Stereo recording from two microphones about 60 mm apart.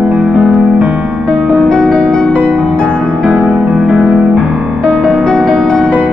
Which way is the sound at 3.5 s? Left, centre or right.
Centre.